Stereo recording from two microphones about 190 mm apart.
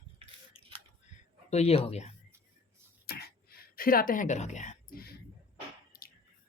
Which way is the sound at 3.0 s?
55° left (ahead or behind).